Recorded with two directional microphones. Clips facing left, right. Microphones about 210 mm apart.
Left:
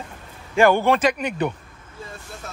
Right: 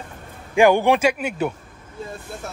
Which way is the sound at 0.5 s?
15° right (ahead or behind).